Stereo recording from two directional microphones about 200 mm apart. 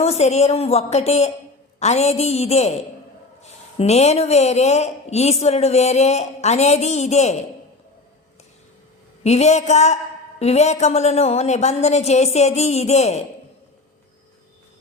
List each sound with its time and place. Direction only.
0.0 s a woman's voice: 30° left (ahead or behind)
3.8 s a woman's voice: 30° left (ahead or behind)
9.2 s a woman's voice: 35° left (ahead or behind)